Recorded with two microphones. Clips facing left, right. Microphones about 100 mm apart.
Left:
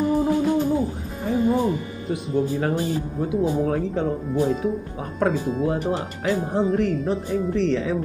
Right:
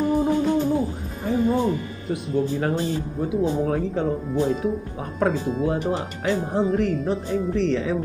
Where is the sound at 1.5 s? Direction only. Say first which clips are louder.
Left 1 dB; 15° left (ahead or behind).